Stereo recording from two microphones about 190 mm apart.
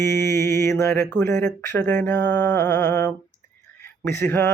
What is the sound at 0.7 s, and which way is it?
Mantra, 15° left (ahead or behind).